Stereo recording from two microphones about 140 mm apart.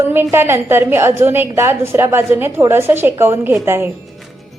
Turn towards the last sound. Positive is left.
turn(degrees=-15)  # may be behind; listen again after turning